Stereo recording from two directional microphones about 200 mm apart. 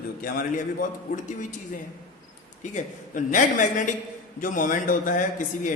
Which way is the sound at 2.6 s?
40° left (ahead or behind).